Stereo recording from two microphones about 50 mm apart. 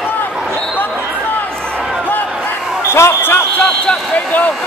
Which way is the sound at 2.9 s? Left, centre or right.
Left.